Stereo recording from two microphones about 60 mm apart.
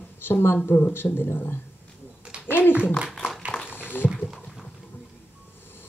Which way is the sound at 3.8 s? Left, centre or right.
Left.